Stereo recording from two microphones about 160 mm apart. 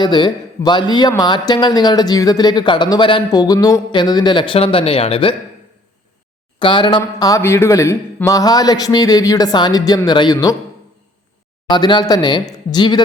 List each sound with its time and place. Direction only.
0.0 s a man's voice: 25° left (ahead or behind)
6.6 s a man's voice: 30° left (ahead or behind)
11.7 s a man's voice: 30° left (ahead or behind)